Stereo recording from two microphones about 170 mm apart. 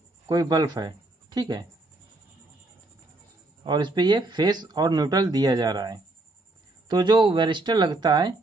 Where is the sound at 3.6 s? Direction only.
25° right (ahead or behind).